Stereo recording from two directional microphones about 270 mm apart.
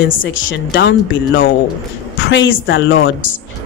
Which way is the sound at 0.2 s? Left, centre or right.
Left.